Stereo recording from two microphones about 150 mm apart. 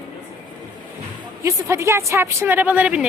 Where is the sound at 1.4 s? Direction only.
20° right (ahead or behind).